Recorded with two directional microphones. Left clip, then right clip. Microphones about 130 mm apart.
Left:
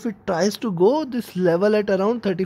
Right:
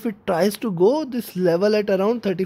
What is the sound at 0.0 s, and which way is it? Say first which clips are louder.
Speech: right 1 dB; 25° right (ahead or behind).